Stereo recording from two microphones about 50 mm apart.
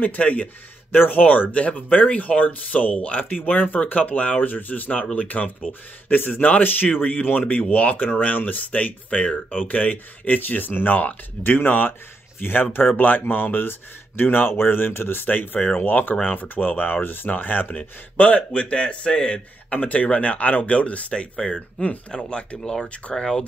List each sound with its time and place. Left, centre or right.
0.0 s speech: left
0.9 s speech: left
1.2 s speech: left
19.7 s speech: left